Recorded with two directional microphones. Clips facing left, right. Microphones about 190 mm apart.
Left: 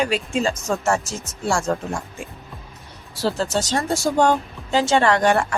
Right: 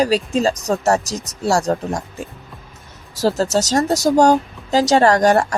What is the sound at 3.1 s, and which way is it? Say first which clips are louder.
Speech: right 5 dB; 40° right (ahead or behind).